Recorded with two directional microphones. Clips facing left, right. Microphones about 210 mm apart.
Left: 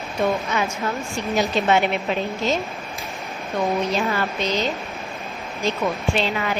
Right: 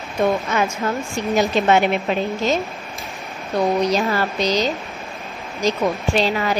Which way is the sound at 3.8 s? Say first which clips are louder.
Right 3 dB; 40° right (ahead or behind).